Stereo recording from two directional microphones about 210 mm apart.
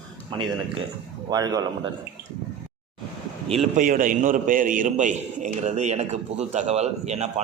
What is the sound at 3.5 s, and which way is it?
A man's voice, 35° right (ahead or behind).